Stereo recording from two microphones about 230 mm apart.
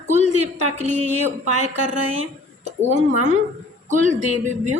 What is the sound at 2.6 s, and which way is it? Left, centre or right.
A woman's voice, right.